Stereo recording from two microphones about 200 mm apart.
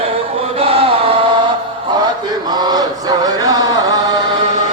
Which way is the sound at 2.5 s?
20° right (ahead or behind).